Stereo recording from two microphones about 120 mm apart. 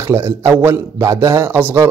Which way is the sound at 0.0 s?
25° right (ahead or behind).